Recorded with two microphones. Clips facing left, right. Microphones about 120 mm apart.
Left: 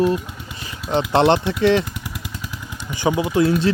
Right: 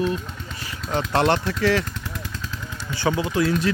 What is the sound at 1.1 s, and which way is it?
Vehicle, 20° left (ahead or behind).